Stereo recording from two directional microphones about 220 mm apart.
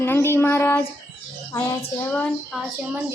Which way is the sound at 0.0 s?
10° left (ahead or behind).